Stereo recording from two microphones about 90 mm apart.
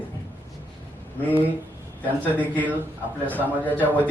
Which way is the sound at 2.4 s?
20° left (ahead or behind).